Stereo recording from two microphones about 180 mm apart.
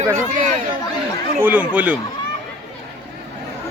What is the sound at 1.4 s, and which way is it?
Speech, 10° right (ahead or behind).